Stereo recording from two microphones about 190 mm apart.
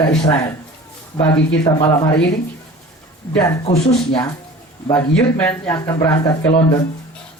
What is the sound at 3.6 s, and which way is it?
Speech, 35° left (ahead or behind).